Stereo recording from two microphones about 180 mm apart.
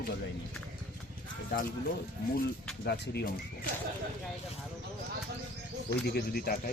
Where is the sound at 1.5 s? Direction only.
65° left (ahead or behind).